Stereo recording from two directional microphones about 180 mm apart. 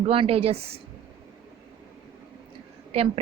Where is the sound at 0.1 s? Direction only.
30° right (ahead or behind).